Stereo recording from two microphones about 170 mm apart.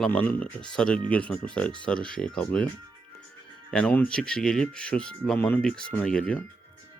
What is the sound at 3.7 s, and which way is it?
Speech, 5° left (ahead or behind).